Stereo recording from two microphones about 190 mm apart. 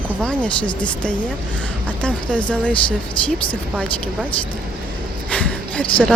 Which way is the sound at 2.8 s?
25° left (ahead or behind).